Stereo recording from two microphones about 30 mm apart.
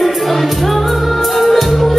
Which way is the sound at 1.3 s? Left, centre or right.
Centre.